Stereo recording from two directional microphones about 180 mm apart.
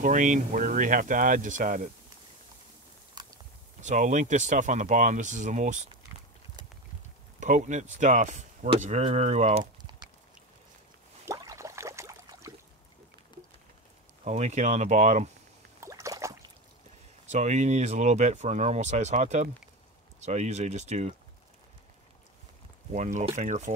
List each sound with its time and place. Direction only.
0.0 s speech: 45° right (ahead or behind)
3.2 s biting: 20° right (ahead or behind)
3.8 s speech: 40° right (ahead or behind)
7.3 s speech: 45° right (ahead or behind)
11.2 s a sound: 20° right (ahead or behind)
14.2 s speech: 40° right (ahead or behind)
15.8 s rowboat: 15° right (ahead or behind)
17.3 s speech: 40° right (ahead or behind)
22.9 s speech: 40° right (ahead or behind)